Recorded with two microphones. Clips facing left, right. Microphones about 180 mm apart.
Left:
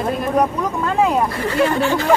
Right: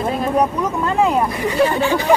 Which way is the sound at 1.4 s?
15° right (ahead or behind).